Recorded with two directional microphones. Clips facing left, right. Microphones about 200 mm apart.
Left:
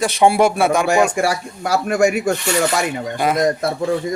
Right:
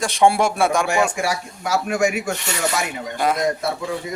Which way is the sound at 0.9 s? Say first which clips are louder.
Left 4 dB; 40° left (ahead or behind).